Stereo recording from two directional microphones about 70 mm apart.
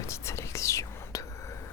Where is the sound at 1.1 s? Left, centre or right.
Left.